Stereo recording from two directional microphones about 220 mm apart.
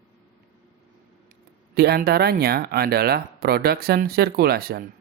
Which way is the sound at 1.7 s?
45° right (ahead or behind).